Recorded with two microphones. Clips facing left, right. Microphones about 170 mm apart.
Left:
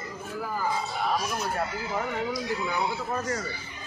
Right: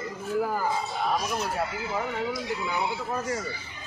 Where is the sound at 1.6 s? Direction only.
5° right (ahead or behind).